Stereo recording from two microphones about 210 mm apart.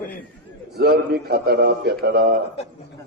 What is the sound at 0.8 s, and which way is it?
A man's voice, 50° right (ahead or behind).